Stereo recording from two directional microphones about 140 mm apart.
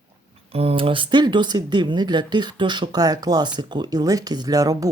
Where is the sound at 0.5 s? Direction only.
45° right (ahead or behind).